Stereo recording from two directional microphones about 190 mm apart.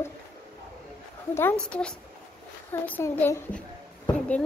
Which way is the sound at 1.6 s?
5° left (ahead or behind).